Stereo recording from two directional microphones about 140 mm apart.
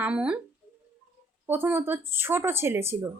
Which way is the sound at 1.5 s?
15° right (ahead or behind).